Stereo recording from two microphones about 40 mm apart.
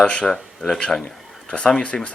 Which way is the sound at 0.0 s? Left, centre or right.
Left.